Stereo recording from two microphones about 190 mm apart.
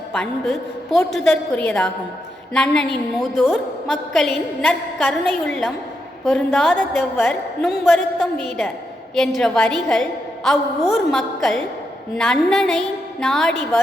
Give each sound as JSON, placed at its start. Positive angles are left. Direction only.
{"t": 0.1, "sound": "a woman's voice", "side_deg": 0}